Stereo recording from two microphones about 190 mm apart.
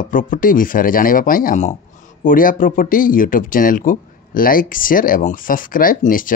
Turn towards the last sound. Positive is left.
turn(degrees=45)  # may be behind; listen again after turning